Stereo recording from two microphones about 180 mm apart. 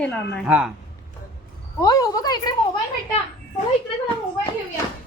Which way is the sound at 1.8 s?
20° left (ahead or behind).